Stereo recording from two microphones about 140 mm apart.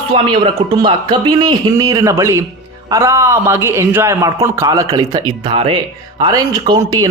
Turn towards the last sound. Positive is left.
turn(degrees=-25)  # may be behind; listen again after turning